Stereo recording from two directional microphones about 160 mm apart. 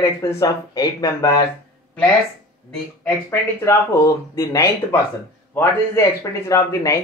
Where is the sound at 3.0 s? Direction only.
15° left (ahead or behind).